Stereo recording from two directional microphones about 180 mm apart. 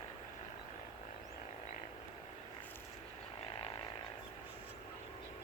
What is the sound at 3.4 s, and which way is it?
Frog, 30° left (ahead or behind).